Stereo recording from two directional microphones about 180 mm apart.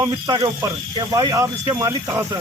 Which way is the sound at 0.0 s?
20° right (ahead or behind).